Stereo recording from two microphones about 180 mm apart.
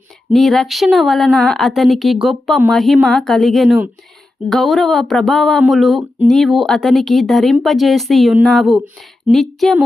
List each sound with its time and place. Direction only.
0.3 s speech: centre (ahead or behind)